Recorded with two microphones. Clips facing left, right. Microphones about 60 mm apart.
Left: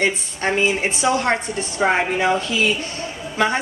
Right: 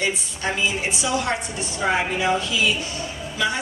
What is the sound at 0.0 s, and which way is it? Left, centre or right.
A woman's voice, left.